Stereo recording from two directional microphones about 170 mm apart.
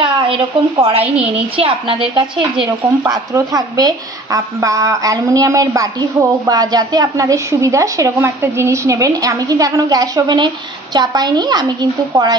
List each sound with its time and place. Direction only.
0.7 s a woman's voice: 35° right (ahead or behind)
1.0 s a woman's voice: 5° right (ahead or behind)
1.6 s a woman's voice: 30° right (ahead or behind)